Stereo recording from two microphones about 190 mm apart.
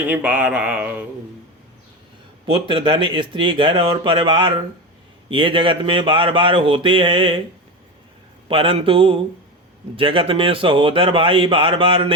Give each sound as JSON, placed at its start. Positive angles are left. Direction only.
{"t": 0.1, "sound": "speech", "side_deg": -10}
{"t": 2.6, "sound": "a man's voice", "side_deg": -25}
{"t": 8.4, "sound": "a man's voice", "side_deg": -30}